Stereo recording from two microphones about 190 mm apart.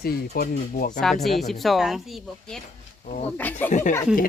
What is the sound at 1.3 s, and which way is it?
Speech, centre (ahead or behind).